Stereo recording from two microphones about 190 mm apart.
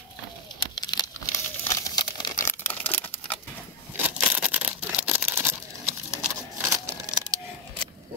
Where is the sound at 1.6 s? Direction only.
15° left (ahead or behind).